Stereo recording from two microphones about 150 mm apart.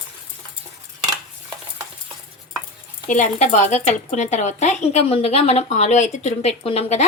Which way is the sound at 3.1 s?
50° left (ahead or behind).